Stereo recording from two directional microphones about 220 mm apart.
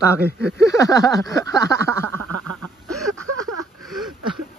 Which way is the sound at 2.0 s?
90° right.